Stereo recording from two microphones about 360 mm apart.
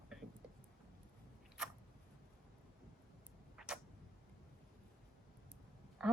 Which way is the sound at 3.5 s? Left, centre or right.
Centre.